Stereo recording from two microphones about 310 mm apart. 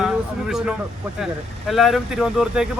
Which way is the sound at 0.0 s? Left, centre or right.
Centre.